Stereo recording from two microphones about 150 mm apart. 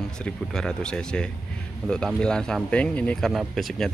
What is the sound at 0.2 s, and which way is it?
Speech, 5° left (ahead or behind).